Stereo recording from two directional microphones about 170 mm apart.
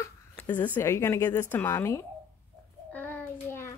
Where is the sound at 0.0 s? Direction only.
10° left (ahead or behind).